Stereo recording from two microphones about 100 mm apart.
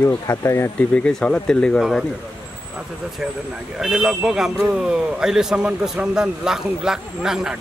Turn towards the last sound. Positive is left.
turn(degrees=-5)  # may be behind; listen again after turning